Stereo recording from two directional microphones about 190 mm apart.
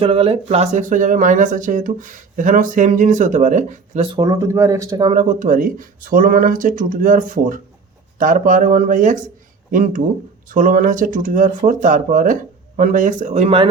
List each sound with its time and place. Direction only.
0.0 s speech: 30° right (ahead or behind)
4.1 s speech: 20° right (ahead or behind)
5.1 s speech: 40° right (ahead or behind)